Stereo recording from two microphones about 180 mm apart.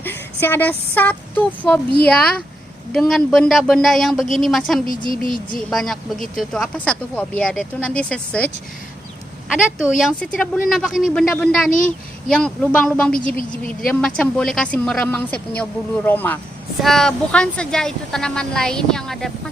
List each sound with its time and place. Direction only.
0.0 s speech: 10° left (ahead or behind)
4.9 s speech: 50° left (ahead or behind)
5.7 s speech: centre (ahead or behind)
10.0 s speech: 5° left (ahead or behind)